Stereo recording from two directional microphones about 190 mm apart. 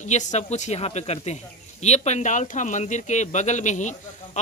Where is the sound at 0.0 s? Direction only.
40° left (ahead or behind).